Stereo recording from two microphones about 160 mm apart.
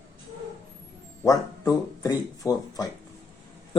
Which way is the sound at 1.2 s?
20° left (ahead or behind).